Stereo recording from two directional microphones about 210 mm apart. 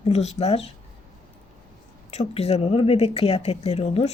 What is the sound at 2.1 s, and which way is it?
Speech, 30° left (ahead or behind).